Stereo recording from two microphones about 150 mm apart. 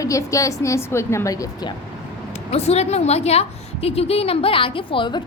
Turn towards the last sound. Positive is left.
turn(degrees=30)  # may be behind; listen again after turning